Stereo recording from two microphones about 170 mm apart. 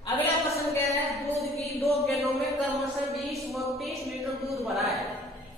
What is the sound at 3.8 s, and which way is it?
Music, centre (ahead or behind).